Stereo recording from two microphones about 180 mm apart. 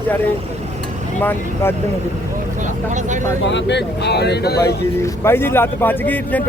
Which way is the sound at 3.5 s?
75° left (ahead or behind).